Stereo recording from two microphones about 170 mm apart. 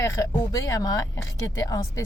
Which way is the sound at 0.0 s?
20° left (ahead or behind).